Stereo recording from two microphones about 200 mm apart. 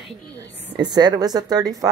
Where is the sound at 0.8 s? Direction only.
20° right (ahead or behind).